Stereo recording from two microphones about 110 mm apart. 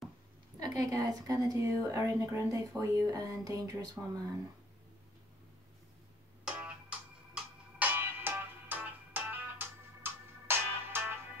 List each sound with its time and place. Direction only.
0.6 s a woman's voice: 30° right (ahead or behind)
6.4 s music: 10° right (ahead or behind)